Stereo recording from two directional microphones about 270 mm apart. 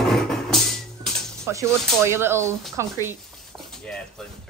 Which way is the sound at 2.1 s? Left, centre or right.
Centre.